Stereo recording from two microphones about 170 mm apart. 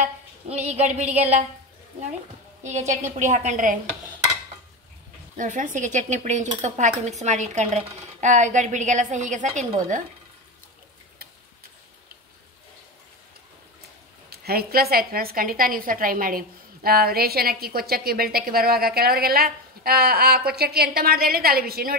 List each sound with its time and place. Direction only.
0.0 s a sound: 40° right (ahead or behind)
2.7 s stir: 45° right (ahead or behind)
5.4 s stir: 50° right (ahead or behind)
14.3 s a woman's voice: 65° right (ahead or behind)